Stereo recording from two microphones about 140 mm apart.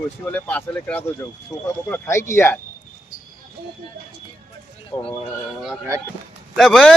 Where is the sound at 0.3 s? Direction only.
10° left (ahead or behind).